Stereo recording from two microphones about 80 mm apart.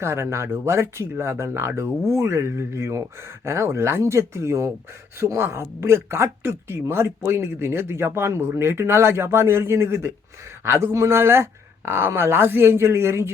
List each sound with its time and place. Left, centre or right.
0.0 s speech: right